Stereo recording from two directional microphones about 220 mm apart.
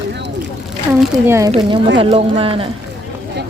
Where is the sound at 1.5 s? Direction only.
20° right (ahead or behind).